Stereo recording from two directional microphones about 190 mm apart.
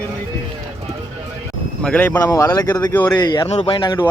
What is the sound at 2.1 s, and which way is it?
Speech, 20° left (ahead or behind).